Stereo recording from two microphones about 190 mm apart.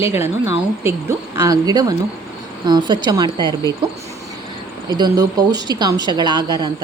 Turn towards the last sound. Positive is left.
turn(degrees=-25)  # may be behind; listen again after turning